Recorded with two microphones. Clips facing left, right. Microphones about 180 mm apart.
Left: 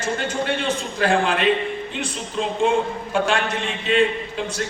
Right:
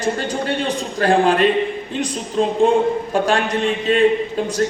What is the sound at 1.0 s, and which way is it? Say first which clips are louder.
Speech: right 5 dB; 40° right (ahead or behind).